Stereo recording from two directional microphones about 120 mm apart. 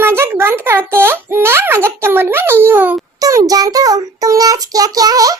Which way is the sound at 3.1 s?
30° right (ahead or behind).